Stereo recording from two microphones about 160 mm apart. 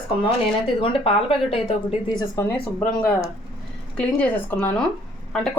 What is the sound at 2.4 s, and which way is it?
A woman's voice, 10° left (ahead or behind).